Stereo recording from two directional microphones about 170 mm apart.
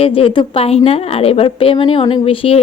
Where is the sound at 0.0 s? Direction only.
35° left (ahead or behind).